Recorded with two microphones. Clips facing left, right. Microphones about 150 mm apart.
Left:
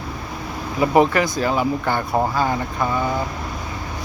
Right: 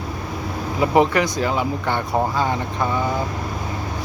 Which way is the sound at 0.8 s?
20° right (ahead or behind).